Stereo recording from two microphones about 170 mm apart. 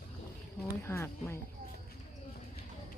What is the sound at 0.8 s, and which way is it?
Speech, 15° left (ahead or behind).